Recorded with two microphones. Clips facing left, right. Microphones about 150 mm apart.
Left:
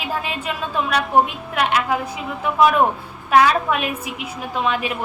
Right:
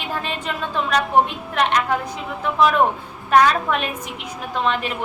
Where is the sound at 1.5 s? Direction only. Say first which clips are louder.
Even; 10° left (ahead or behind).